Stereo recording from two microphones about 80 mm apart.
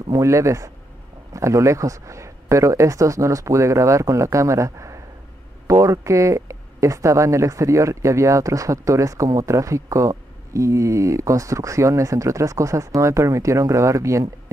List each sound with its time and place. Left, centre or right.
0.1 s speech: right